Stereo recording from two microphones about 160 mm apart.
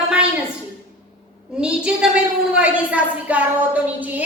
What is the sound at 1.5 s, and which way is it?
A woman's voice, 5° right (ahead or behind).